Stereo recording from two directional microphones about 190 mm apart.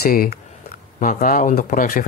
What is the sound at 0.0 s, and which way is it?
Speech, 55° left (ahead or behind).